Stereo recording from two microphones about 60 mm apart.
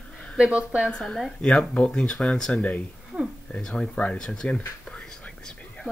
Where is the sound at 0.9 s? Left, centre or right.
Centre.